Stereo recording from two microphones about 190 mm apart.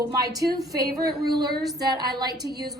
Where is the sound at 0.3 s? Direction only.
20° right (ahead or behind).